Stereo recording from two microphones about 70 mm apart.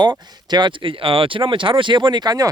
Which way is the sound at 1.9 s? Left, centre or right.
Right.